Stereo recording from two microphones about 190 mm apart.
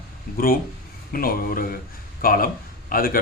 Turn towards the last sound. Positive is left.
turn(degrees=50)  # may be behind; listen again after turning